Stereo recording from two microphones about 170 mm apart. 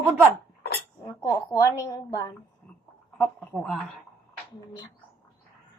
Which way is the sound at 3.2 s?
5° left (ahead or behind).